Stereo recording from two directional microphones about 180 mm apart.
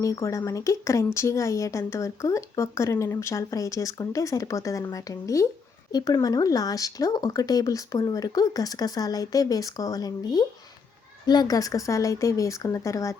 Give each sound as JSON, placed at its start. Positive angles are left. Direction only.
{"t": 0.0, "sound": "speech", "side_deg": 15}